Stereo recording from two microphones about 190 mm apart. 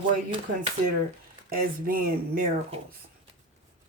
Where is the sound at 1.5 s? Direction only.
50° right (ahead or behind).